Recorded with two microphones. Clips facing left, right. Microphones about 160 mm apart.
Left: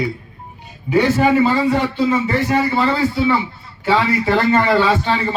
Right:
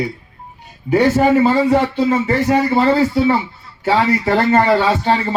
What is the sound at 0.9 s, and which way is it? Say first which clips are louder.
Speech: right 2 dB; 45° right (ahead or behind).